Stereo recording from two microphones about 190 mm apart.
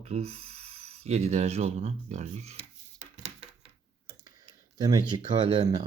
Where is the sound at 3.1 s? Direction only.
35° right (ahead or behind).